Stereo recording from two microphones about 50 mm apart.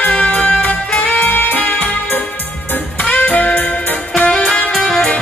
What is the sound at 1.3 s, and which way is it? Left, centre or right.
Music, left.